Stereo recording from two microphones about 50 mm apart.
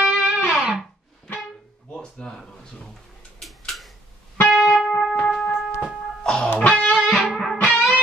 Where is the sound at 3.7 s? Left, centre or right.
Centre.